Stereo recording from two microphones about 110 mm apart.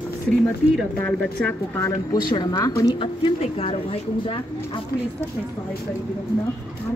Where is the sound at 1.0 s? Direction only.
10° left (ahead or behind).